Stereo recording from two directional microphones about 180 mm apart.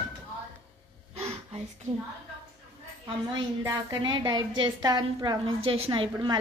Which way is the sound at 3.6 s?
20° right (ahead or behind).